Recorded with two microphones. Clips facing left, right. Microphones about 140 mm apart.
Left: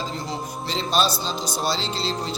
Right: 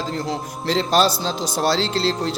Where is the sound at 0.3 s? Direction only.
90° right.